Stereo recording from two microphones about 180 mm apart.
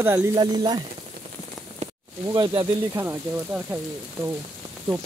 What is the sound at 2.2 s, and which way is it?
Speech, 25° right (ahead or behind).